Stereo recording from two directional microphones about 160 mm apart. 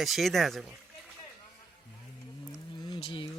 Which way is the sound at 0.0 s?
Centre (ahead or behind).